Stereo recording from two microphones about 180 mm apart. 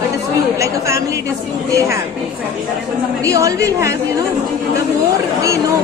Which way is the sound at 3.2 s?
20° right (ahead or behind).